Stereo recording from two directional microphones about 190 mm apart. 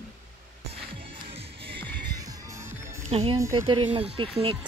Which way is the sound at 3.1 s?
30° right (ahead or behind).